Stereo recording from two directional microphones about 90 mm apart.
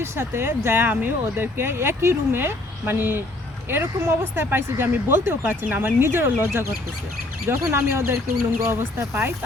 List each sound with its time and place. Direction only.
0.0 s speech: 25° right (ahead or behind)